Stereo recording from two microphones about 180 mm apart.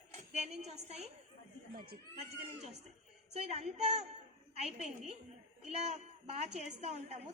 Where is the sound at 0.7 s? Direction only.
35° right (ahead or behind).